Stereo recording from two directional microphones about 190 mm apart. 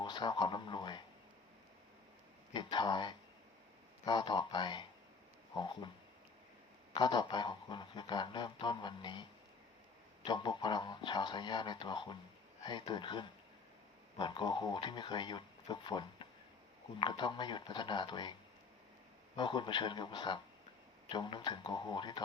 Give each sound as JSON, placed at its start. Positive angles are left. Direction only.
{"t": 0.0, "sound": "speech", "side_deg": 25}
{"t": 2.5, "sound": "speech", "side_deg": 25}
{"t": 6.9, "sound": "speech", "side_deg": 25}
{"t": 10.2, "sound": "speech", "side_deg": 25}
{"t": 19.4, "sound": "speech", "side_deg": 25}